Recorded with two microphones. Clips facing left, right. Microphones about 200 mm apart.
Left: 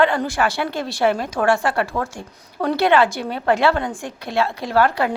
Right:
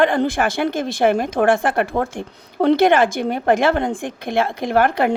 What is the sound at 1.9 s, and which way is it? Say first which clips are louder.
Speech: right 4 dB; 30° right (ahead or behind).